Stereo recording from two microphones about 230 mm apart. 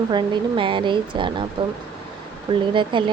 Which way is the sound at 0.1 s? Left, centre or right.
Right.